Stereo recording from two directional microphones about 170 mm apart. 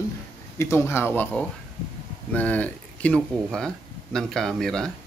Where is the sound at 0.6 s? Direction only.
15° left (ahead or behind).